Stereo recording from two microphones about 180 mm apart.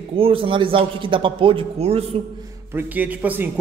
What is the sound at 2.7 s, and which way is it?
Speech, 10° right (ahead or behind).